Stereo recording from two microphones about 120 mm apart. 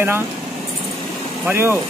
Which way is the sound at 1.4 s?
20° right (ahead or behind).